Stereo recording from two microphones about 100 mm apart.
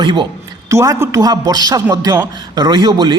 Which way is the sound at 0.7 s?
30° right (ahead or behind).